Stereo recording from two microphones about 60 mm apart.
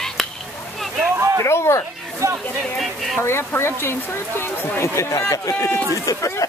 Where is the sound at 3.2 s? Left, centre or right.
Left.